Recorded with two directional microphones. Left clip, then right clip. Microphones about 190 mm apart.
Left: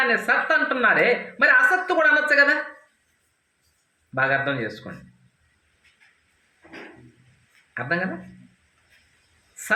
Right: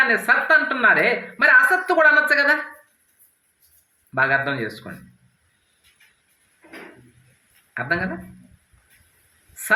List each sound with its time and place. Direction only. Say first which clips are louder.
0.1 s a woman's voice: right 3 dB; 35° right (ahead or behind)
4.1 s a woman's voice: right 2 dB; 35° right (ahead or behind)
7.7 s a woman's voice: right 2 dB; 35° right (ahead or behind)